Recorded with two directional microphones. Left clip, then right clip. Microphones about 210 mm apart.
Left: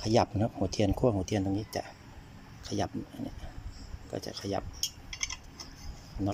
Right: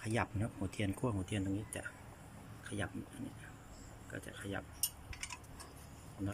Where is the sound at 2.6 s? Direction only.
25° left (ahead or behind).